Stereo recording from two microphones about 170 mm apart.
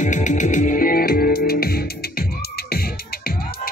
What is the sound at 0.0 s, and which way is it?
Music, 45° left (ahead or behind).